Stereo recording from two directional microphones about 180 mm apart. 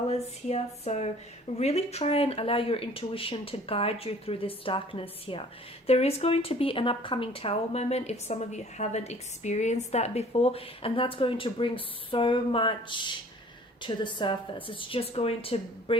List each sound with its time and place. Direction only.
0.1 s a woman's voice: 35° left (ahead or behind)